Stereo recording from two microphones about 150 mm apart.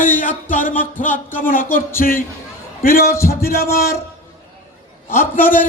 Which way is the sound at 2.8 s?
75° left (ahead or behind).